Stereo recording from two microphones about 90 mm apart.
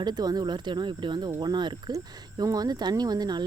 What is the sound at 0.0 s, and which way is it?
Speech, 50° right (ahead or behind).